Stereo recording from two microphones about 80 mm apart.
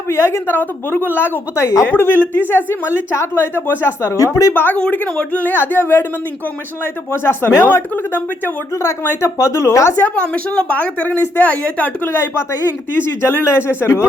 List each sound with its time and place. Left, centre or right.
0.1 s a woman's voice: left
4.5 s a woman's voice: left
7.1 s a woman's voice: left
8.7 s speech: left
10.0 s a woman's voice: centre
12.1 s speech: left